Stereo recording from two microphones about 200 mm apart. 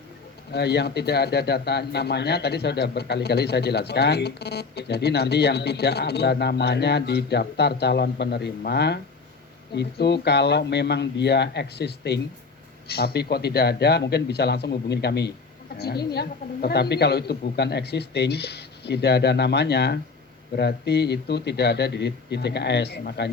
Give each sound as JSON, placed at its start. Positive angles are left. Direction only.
{"t": 0.5, "sound": "speech", "side_deg": 55}